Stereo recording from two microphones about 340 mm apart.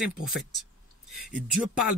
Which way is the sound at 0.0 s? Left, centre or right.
Centre.